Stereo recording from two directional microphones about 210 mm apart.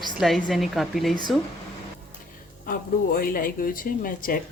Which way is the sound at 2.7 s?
45° left (ahead or behind).